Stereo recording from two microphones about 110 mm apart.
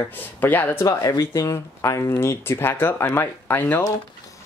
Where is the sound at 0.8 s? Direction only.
30° left (ahead or behind).